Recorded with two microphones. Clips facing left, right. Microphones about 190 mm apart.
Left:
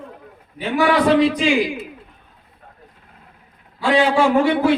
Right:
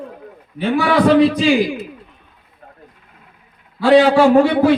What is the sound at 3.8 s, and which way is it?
Speech, 35° right (ahead or behind).